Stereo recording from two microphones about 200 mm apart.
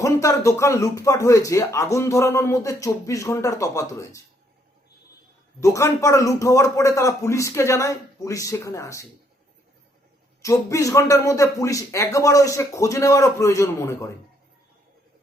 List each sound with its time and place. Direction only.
0.0 s speech: 15° left (ahead or behind)
5.5 s speech: 15° left (ahead or behind)
10.4 s speech: 15° left (ahead or behind)